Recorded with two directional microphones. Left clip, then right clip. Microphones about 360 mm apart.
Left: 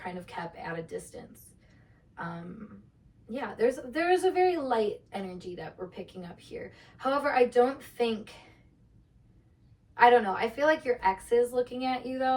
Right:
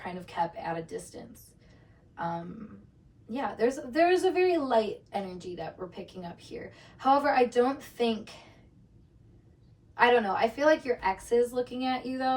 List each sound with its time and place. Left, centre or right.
0.0 s a woman's voice: centre
2.1 s a sound: centre
3.2 s a woman's voice: centre
9.9 s a woman's voice: centre